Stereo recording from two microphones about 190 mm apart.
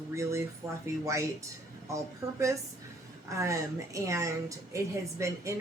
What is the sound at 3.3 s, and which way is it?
Speech, 15° right (ahead or behind).